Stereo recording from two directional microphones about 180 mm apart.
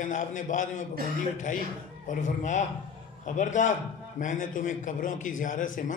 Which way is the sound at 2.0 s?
45° left (ahead or behind).